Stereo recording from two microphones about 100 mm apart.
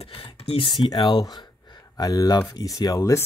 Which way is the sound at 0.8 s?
50° left (ahead or behind).